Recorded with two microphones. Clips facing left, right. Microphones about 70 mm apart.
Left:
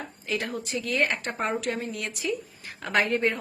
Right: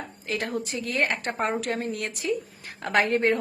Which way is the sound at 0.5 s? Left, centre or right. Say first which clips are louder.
Right 1 dB; right.